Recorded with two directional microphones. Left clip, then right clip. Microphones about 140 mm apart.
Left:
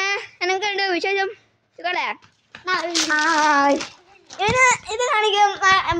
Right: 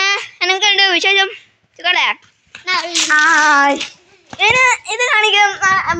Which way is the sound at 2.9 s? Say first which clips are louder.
Right 7 dB; 20° left (ahead or behind).